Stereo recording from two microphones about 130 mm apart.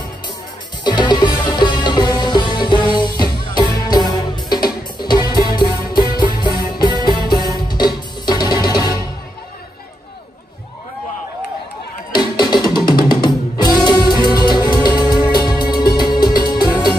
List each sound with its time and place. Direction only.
0.8 s music: 35° left (ahead or behind)
12.2 s music: 30° left (ahead or behind)